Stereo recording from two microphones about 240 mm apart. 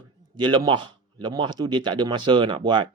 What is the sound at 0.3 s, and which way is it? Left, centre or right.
Speech, centre.